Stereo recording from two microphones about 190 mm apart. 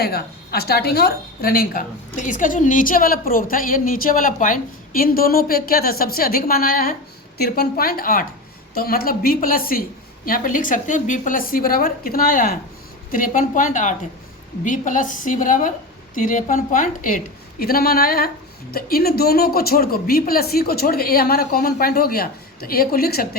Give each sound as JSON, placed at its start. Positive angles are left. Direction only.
{"t": 0.0, "sound": "a woman's voice", "side_deg": 55}